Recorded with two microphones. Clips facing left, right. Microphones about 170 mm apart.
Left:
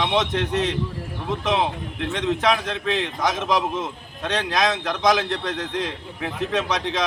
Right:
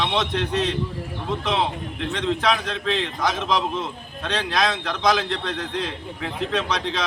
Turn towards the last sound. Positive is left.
turn(degrees=15)  # may be behind; listen again after turning